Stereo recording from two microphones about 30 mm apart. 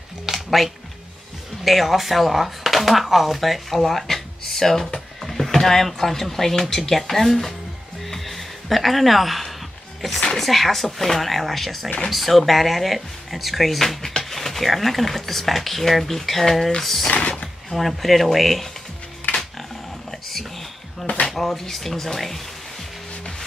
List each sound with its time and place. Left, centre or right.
0.3 s music: centre
1.6 s speech: centre
8.0 s music: centre
10.3 s speech: centre
17.1 s a sound: left
17.7 s speech: centre
19.3 s dog: left
20.1 s a sound: centre
21.3 s drawer open or close: centre
21.6 s speech: centre